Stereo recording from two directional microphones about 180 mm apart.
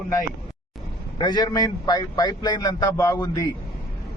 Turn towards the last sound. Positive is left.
turn(degrees=20)  # may be behind; listen again after turning